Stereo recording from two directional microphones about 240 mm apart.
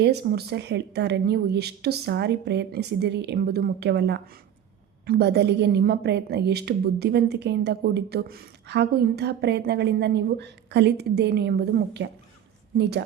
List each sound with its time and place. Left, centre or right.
0.0 s a woman's voice: right